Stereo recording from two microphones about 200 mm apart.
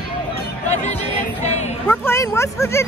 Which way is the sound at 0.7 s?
35° left (ahead or behind).